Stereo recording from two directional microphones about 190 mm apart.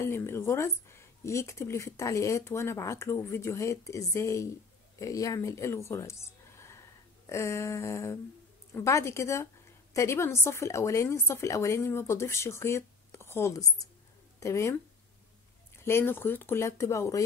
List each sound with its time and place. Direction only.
0.0 s a woman's voice: 15° left (ahead or behind)
15.8 s a woman's voice: 15° left (ahead or behind)